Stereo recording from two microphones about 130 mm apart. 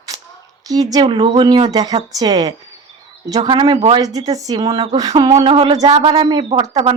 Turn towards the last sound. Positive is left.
turn(degrees=-50)  # may be behind; listen again after turning